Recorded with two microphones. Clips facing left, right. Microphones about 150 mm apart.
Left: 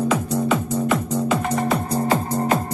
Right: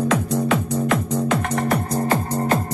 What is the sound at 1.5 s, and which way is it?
Music, 15° left (ahead or behind).